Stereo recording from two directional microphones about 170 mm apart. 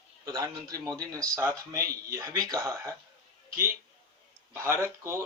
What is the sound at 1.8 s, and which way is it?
Speech, 60° right (ahead or behind).